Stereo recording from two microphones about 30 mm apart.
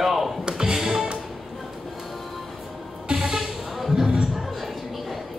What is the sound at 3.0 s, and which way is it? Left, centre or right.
Music, right.